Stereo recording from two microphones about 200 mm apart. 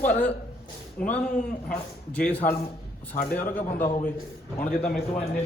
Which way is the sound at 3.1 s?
40° left (ahead or behind).